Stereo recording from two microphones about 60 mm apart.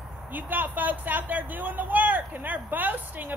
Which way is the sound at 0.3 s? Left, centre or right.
Right.